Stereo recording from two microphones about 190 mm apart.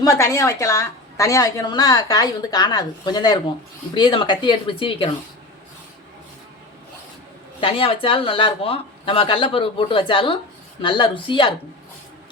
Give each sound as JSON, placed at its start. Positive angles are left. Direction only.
{"t": 0.0, "sound": "a woman's voice", "side_deg": 15}
{"t": 7.6, "sound": "a woman's voice", "side_deg": 30}